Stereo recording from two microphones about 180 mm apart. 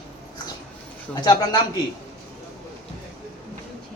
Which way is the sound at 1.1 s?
20° left (ahead or behind).